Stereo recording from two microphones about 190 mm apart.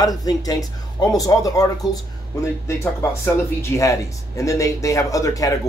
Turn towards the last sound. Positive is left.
turn(degrees=15)  # may be behind; listen again after turning